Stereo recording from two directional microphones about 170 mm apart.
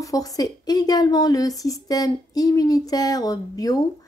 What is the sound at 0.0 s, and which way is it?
Speech, 20° left (ahead or behind).